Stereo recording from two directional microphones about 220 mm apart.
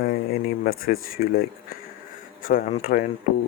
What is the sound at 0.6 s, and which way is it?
Speech, 40° left (ahead or behind).